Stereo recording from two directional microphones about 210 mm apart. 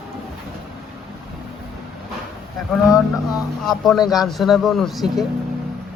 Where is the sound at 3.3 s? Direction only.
Centre (ahead or behind).